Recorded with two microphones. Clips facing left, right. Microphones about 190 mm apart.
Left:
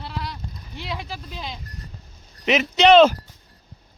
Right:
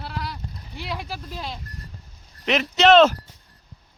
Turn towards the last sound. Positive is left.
turn(degrees=0)  # may be behind; listen again after turning